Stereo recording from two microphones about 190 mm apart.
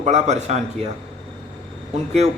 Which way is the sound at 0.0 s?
35° right (ahead or behind).